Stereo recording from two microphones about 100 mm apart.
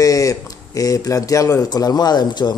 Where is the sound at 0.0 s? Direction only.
35° left (ahead or behind).